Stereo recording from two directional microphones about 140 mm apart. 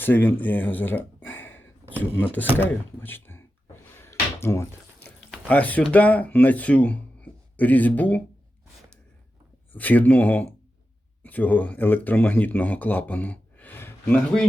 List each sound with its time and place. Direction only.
0.0 s speech: 15° left (ahead or behind)
3.9 s drawer open or close: 15° left (ahead or behind)
4.9 s speech: 10° left (ahead or behind)
9.7 s speech: 10° left (ahead or behind)